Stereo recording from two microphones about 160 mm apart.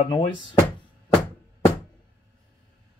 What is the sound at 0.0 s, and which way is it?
Speech, 25° left (ahead or behind).